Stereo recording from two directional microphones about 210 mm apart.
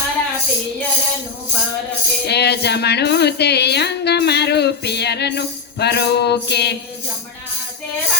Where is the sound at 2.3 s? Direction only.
50° left (ahead or behind).